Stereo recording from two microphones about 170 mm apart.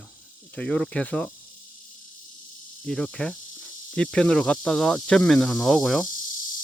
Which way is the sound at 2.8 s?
5° left (ahead or behind).